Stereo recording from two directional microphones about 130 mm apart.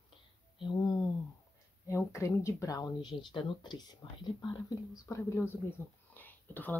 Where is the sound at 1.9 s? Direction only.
25° left (ahead or behind).